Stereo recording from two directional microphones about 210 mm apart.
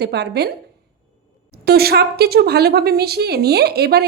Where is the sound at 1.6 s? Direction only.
50° right (ahead or behind).